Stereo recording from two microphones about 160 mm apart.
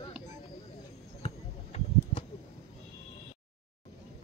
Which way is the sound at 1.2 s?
40° left (ahead or behind).